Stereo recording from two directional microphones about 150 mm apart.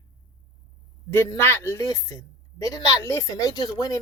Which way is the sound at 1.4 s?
15° left (ahead or behind).